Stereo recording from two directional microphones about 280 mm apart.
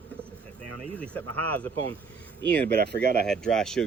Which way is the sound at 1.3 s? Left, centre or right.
Right.